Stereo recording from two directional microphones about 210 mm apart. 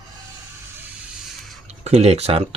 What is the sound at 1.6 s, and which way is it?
Speech, 30° right (ahead or behind).